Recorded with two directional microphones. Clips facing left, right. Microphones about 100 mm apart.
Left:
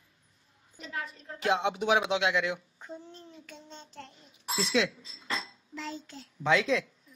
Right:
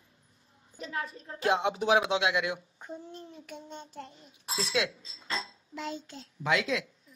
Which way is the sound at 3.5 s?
15° right (ahead or behind).